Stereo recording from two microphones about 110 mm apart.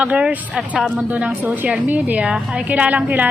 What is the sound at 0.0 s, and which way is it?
A woman's voice, 10° right (ahead or behind).